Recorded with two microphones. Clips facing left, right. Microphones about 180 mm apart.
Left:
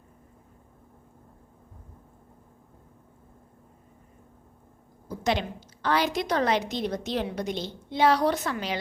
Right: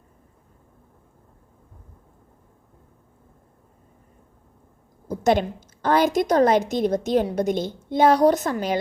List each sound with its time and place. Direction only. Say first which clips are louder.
5.0 s a woman's voice: right 7 dB; 45° right (ahead or behind)